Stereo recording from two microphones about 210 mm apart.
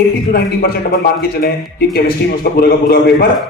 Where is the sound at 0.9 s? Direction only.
45° left (ahead or behind).